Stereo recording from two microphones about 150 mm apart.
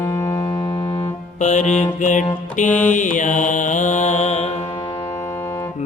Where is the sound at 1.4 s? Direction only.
55° left (ahead or behind).